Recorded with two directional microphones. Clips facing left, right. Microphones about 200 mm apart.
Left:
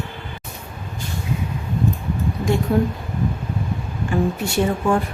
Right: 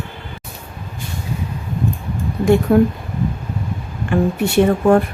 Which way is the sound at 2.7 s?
55° right (ahead or behind).